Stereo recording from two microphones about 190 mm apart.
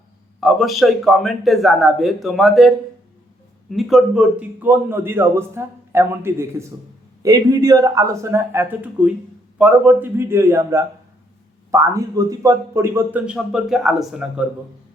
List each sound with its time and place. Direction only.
0.3 s a man's voice: centre (ahead or behind)